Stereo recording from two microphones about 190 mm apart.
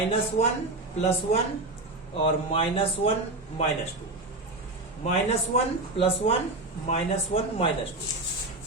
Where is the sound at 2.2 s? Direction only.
30° left (ahead or behind).